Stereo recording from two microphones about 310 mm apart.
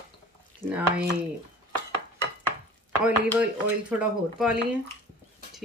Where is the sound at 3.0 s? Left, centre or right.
Centre.